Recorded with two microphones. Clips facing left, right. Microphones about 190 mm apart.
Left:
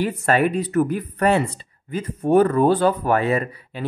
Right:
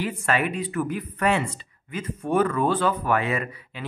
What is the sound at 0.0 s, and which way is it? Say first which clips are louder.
Speech: left 6 dB; 35° left (ahead or behind).